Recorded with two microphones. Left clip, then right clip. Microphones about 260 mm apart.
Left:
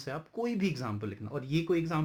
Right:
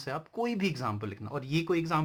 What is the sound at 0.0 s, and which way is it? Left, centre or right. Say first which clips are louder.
Speech: right 2 dB; centre.